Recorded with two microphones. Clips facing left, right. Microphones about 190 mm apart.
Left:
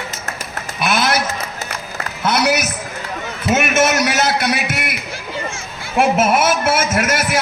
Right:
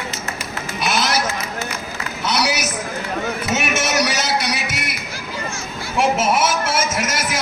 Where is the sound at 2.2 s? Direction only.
55° left (ahead or behind).